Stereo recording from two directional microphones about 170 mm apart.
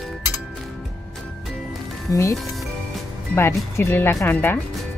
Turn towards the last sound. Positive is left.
turn(degrees=10)  # may be behind; listen again after turning